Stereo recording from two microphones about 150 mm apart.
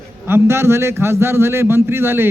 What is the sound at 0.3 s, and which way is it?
Speech, 15° right (ahead or behind).